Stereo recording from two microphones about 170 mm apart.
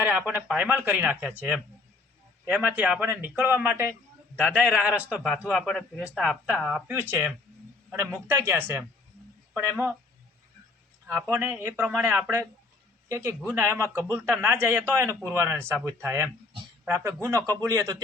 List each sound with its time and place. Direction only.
0.0 s a man's voice: 10° right (ahead or behind)
8.3 s speech: 15° right (ahead or behind)
11.1 s speech: 15° right (ahead or behind)